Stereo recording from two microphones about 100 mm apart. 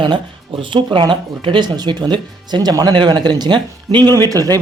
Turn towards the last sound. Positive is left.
turn(degrees=-35)  # may be behind; listen again after turning